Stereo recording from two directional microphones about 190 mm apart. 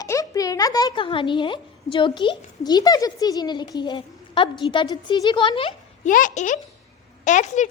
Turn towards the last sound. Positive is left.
turn(degrees=40)  # may be behind; listen again after turning